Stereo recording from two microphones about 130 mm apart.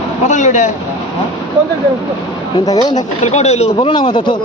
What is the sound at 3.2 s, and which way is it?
Speech, 60° left (ahead or behind).